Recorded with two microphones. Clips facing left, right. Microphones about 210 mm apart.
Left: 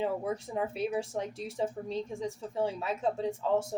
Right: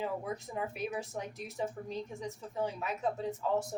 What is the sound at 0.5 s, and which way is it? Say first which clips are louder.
A woman's voice: left 5 dB; 30° left (ahead or behind).